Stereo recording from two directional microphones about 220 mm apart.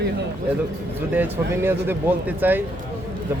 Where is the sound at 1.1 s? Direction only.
10° right (ahead or behind).